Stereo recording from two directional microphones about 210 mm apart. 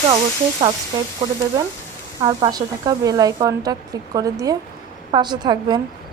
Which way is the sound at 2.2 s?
20° right (ahead or behind).